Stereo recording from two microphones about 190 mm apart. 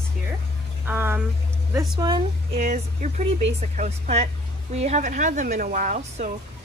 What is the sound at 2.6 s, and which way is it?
A woman's voice, 40° right (ahead or behind).